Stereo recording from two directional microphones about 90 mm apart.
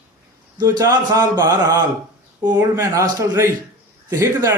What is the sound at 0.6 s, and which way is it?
Speech, 50° right (ahead or behind).